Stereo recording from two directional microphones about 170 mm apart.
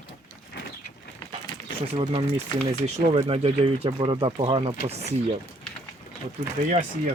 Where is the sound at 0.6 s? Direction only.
80° left.